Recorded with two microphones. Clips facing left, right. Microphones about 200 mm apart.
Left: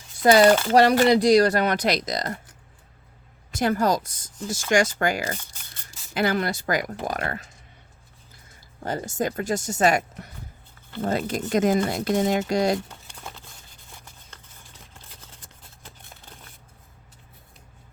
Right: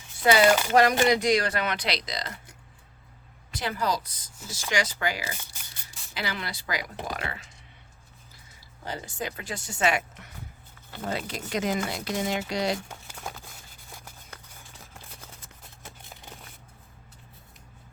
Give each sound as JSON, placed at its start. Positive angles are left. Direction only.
{"t": 0.2, "sound": "speech", "side_deg": 40}
{"t": 0.4, "sound": "speech", "side_deg": -10}
{"t": 0.7, "sound": "speech", "side_deg": 35}
{"t": 3.5, "sound": "speech", "side_deg": 45}
{"t": 8.8, "sound": "speech", "side_deg": 50}
{"t": 13.1, "sound": "a sound", "side_deg": -10}